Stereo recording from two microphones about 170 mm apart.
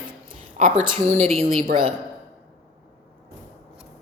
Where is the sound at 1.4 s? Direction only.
35° right (ahead or behind).